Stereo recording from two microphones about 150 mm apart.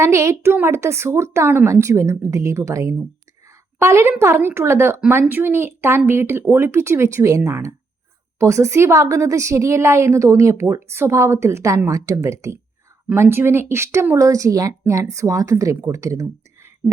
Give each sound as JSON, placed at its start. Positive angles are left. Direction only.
{"t": 0.0, "sound": "a woman's voice", "side_deg": -20}